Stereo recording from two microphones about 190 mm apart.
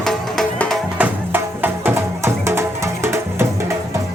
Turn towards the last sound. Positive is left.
turn(degrees=-15)  # may be behind; listen again after turning